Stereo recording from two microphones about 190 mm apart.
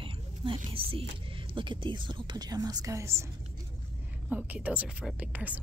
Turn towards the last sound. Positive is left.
turn(degrees=-10)  # may be behind; listen again after turning